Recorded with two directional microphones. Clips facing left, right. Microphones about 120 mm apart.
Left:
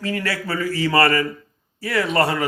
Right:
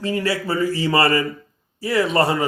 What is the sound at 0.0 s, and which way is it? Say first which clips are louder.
A man's voice: right 3 dB; 25° right (ahead or behind).